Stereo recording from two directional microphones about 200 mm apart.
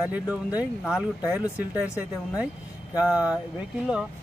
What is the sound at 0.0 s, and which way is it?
Speech, 5° right (ahead or behind).